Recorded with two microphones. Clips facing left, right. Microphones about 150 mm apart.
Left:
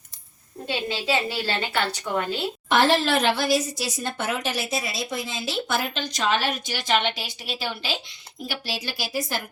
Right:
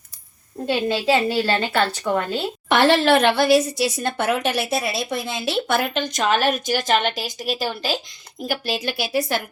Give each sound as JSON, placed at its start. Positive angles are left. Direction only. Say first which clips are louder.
{"t": 0.7, "sound": "a woman's voice", "louder": "right 6 dB", "side_deg": -55}
{"t": 2.6, "sound": "speech", "louder": "right 4 dB", "side_deg": -65}
{"t": 8.4, "sound": "speech", "louder": "right 7 dB", "side_deg": -55}